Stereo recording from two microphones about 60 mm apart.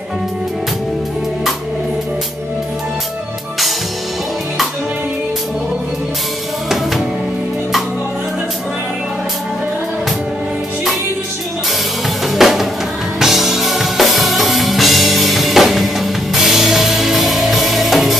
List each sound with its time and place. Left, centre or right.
12.4 s music: centre